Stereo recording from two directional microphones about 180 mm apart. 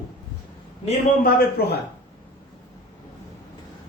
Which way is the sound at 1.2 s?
60° left (ahead or behind).